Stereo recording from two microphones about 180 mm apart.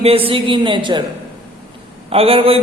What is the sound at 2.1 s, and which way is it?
Speech, 30° right (ahead or behind).